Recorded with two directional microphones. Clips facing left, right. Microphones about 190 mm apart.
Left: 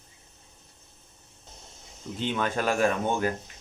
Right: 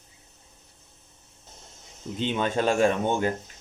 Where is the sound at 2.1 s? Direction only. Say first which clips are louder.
Right 3 dB; 20° right (ahead or behind).